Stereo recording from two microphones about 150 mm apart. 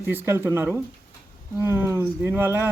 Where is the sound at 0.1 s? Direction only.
15° right (ahead or behind).